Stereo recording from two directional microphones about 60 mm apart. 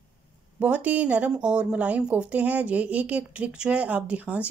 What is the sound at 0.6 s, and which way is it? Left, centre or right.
Speech, right.